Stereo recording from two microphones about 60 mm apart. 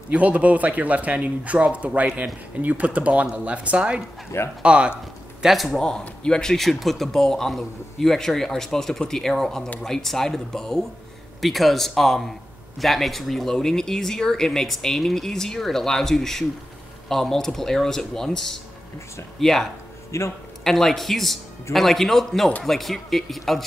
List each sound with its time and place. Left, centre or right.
0.1 s speech: right
4.3 s speech: left
4.6 s speech: centre
5.4 s speech: centre
5.7 s speech: centre
20.1 s a man's voice: left
20.6 s speech: centre